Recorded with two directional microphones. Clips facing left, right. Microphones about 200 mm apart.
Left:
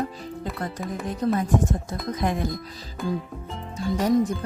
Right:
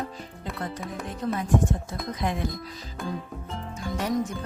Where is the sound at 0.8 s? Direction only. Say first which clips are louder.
Left 7 dB; centre (ahead or behind).